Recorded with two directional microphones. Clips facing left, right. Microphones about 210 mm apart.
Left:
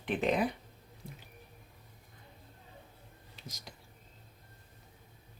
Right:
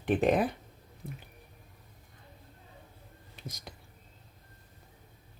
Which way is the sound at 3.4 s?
55° right (ahead or behind).